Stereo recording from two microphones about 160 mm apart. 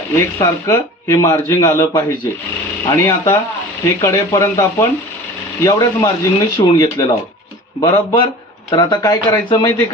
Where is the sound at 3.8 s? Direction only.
20° left (ahead or behind).